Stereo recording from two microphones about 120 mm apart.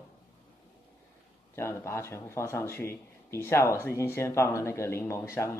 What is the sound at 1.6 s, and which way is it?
Speech, 20° left (ahead or behind).